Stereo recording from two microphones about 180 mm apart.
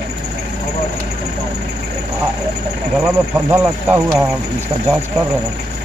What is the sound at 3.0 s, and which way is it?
Speech, 10° right (ahead or behind).